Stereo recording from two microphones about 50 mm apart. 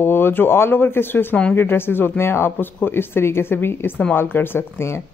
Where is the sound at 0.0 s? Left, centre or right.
Left.